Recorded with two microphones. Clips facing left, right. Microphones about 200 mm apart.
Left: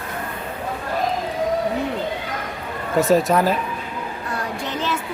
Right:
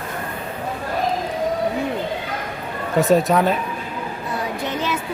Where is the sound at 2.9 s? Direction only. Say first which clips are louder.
Even; centre (ahead or behind).